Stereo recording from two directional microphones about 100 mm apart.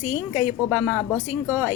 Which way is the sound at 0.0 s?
20° right (ahead or behind).